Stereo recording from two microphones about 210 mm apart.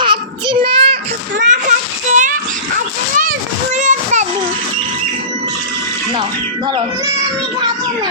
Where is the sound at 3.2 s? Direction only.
40° right (ahead or behind).